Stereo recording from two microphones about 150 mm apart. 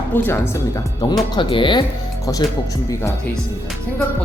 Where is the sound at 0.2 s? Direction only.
15° left (ahead or behind).